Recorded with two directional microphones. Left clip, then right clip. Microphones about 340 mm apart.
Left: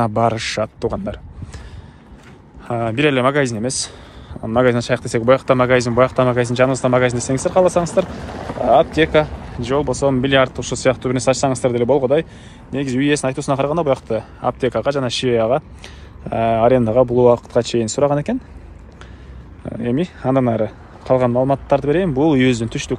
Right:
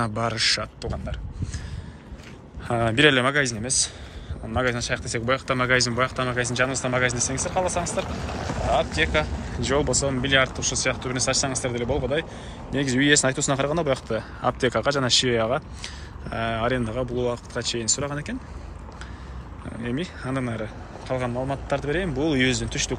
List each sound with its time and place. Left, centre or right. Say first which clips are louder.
0.0 s speech: left 7 dB; centre
2.7 s speech: left 2 dB; centre
8.0 s speech: left 8 dB; left
8.7 s speech: left 9 dB; centre
19.8 s speech: left 10 dB; centre